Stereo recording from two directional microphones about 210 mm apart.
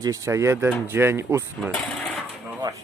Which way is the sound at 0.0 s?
15° right (ahead or behind).